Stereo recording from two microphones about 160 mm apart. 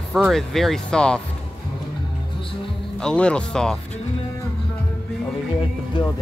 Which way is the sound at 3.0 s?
5° left (ahead or behind).